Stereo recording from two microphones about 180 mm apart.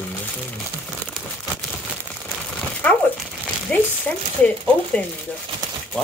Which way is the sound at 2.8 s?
10° left (ahead or behind).